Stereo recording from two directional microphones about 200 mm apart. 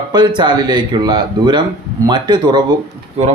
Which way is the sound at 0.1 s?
20° right (ahead or behind).